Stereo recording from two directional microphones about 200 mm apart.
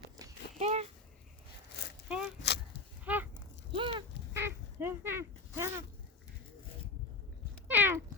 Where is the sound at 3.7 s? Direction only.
25° right (ahead or behind).